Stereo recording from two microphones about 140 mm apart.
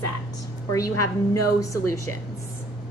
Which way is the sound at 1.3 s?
25° left (ahead or behind).